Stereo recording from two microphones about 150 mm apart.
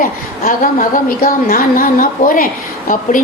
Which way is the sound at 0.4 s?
65° left (ahead or behind).